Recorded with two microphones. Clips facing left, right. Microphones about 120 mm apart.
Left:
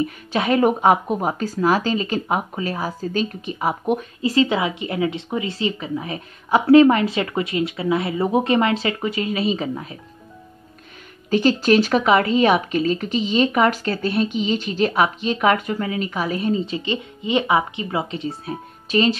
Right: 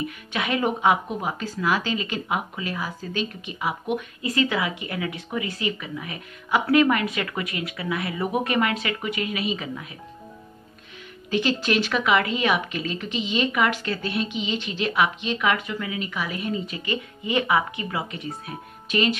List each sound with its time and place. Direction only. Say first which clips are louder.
0.0 s speech: left 6 dB; 35° left (ahead or behind)
11.2 s speech: left 7 dB; 40° left (ahead or behind)